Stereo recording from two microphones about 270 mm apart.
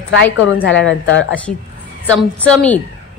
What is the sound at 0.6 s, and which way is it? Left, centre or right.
Speech, left.